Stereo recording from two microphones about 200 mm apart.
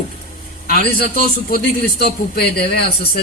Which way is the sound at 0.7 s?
50° left (ahead or behind).